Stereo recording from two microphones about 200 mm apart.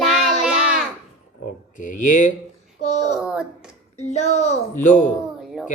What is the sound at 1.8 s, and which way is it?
A child's voice, 40° left (ahead or behind).